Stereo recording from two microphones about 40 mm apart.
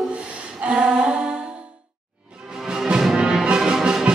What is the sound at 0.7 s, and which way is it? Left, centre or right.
Humming, right.